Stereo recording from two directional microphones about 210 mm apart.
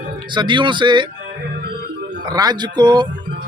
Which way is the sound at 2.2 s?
20° right (ahead or behind).